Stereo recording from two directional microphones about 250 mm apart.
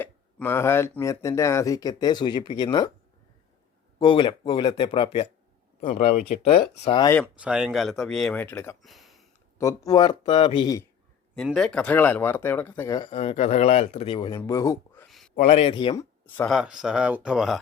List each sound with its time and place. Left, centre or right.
0.0 s speech: centre
3.9 s speech: centre
7.2 s speech: centre
9.6 s speech: centre
11.3 s speech: centre
15.4 s speech: left
16.2 s speech: centre